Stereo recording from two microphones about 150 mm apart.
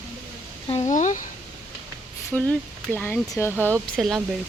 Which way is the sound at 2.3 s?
10° left (ahead or behind).